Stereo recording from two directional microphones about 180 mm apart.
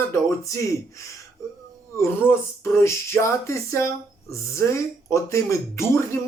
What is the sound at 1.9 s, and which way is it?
Speech, 15° left (ahead or behind).